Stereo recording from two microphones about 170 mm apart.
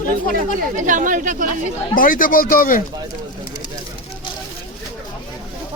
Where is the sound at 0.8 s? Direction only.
50° right (ahead or behind).